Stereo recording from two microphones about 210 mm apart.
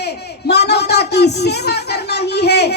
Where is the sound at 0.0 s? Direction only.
50° left (ahead or behind).